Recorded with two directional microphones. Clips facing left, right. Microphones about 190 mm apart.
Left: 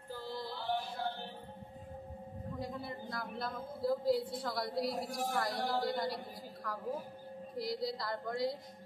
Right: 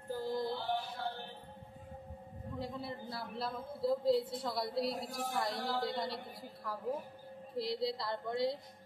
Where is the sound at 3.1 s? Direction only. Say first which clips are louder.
Even; 30° right (ahead or behind).